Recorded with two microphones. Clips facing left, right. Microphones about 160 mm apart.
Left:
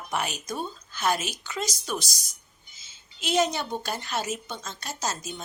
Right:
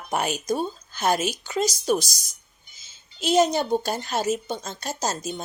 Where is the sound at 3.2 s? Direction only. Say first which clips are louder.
Right 5 dB; 40° right (ahead or behind).